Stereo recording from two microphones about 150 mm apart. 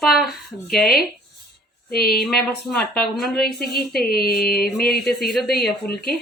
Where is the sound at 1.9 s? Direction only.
90° left.